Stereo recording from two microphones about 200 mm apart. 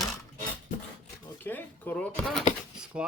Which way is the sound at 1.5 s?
10° left (ahead or behind).